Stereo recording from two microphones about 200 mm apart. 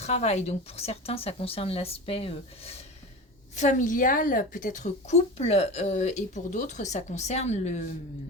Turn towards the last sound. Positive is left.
turn(degrees=35)  # may be behind; listen again after turning